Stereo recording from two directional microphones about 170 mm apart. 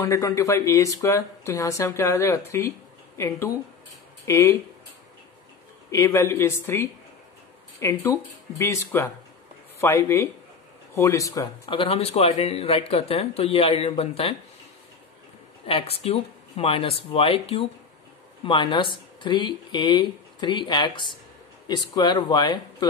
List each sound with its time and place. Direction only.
0.0 s speech: 20° left (ahead or behind)
5.9 s speech: 20° left (ahead or behind)
11.6 s speech: 35° left (ahead or behind)
15.6 s speech: 35° left (ahead or behind)